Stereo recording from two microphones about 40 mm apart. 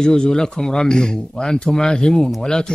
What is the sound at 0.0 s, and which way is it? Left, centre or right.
Speech, centre.